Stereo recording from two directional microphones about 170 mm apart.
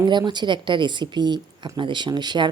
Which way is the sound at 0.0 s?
25° right (ahead or behind).